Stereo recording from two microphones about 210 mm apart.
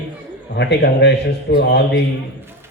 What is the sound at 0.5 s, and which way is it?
A man's voice, 55° left (ahead or behind).